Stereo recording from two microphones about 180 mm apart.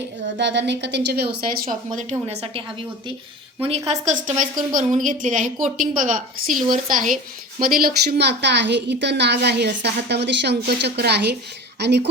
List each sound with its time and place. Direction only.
0.3 s a woman's voice: 75° right (ahead or behind); by 2.1 s 50° right (ahead or behind)
2.2 s a woman's voice: 35° right (ahead or behind); by 12.0 s 70° right (ahead or behind)